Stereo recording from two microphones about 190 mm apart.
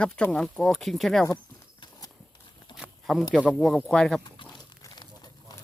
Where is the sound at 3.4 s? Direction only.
Centre (ahead or behind).